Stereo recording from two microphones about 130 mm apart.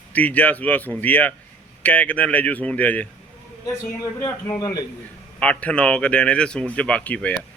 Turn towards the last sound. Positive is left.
turn(degrees=10)  # may be behind; listen again after turning